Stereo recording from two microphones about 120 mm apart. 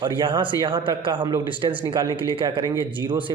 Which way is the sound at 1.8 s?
30° right (ahead or behind).